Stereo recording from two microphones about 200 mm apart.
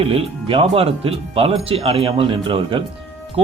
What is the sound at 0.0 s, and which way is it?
Speech, 30° right (ahead or behind).